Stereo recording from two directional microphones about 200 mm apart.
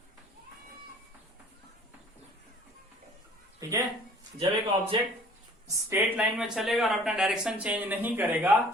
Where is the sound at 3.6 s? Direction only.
15° right (ahead or behind).